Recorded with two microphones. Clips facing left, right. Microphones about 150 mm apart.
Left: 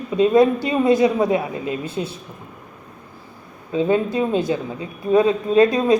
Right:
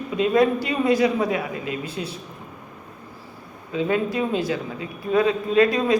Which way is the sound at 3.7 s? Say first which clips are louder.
Left 4 dB; 30° left (ahead or behind).